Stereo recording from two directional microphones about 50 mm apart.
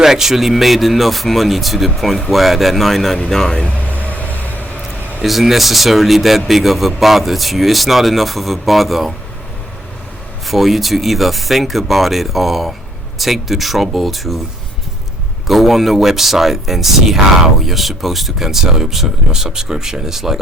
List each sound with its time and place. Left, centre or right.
0.0 s speech: centre
4.0 s vehicle: left
5.2 s speech: centre
10.4 s speech: centre
15.4 s speech: centre